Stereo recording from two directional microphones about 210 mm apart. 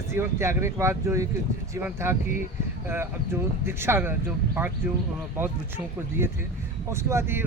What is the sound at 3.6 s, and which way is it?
Speech, 10° right (ahead or behind).